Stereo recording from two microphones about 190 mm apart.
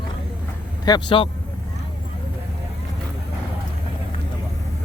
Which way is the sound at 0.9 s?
25° left (ahead or behind).